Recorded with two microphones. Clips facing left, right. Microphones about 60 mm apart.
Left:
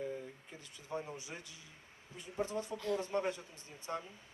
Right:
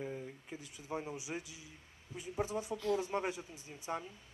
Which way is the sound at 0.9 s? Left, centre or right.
Centre.